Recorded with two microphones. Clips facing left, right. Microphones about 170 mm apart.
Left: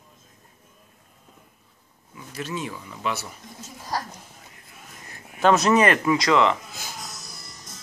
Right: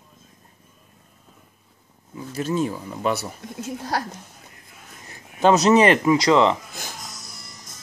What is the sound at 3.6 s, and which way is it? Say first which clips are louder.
Speech: right 4 dB; 65° right (ahead or behind).